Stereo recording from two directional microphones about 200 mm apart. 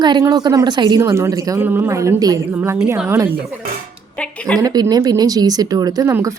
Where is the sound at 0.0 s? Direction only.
20° right (ahead or behind).